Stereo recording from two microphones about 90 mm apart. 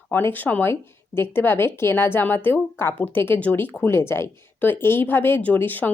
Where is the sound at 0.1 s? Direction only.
25° left (ahead or behind).